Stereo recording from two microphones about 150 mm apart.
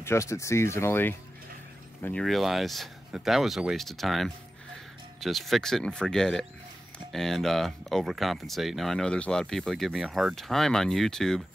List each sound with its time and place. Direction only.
0.0 s speech: 20° left (ahead or behind)
2.2 s speech: centre (ahead or behind)